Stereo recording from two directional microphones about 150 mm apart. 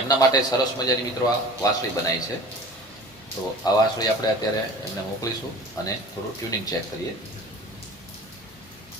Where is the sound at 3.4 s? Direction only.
20° left (ahead or behind).